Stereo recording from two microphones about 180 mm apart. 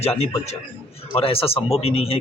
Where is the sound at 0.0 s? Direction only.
35° left (ahead or behind).